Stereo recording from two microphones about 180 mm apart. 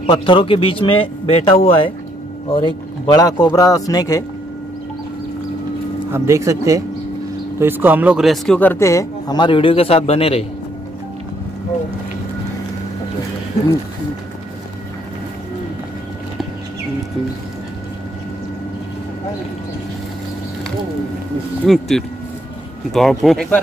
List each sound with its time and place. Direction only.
0.1 s a man's voice: 30° left (ahead or behind)
6.1 s speech: 15° right (ahead or behind); by 10.4 s 35° left (ahead or behind)
21.6 s speech: centre (ahead or behind)